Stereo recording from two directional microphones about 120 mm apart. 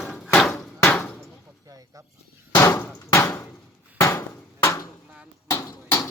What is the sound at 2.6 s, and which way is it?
Hammer, 20° left (ahead or behind).